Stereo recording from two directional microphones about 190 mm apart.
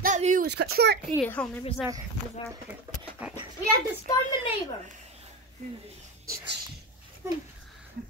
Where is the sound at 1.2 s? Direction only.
5° left (ahead or behind).